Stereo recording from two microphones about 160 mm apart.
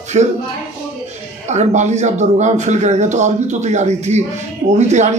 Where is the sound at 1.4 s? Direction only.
45° right (ahead or behind).